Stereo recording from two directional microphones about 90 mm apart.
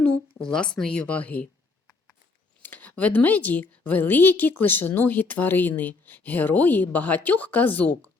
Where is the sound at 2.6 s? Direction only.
20° left (ahead or behind).